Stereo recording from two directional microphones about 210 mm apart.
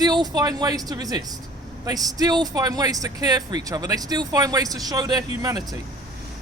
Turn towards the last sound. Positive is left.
turn(degrees=-20)  # may be behind; listen again after turning